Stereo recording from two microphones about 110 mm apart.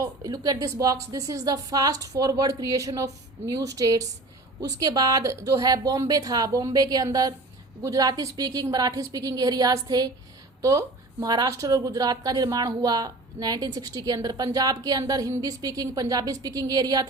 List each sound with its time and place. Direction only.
0.0 s speech: 35° right (ahead or behind)